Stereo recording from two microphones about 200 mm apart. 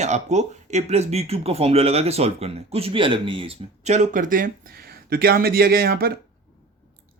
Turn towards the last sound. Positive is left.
turn(degrees=-50)  # may be behind; listen again after turning